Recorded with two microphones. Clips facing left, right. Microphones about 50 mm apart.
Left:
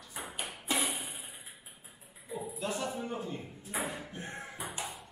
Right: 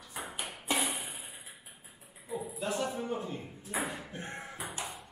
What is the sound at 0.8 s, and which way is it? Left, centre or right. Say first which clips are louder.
Music: even; right.